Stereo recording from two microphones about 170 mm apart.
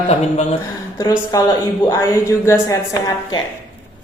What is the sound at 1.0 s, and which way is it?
A woman's voice, 25° left (ahead or behind).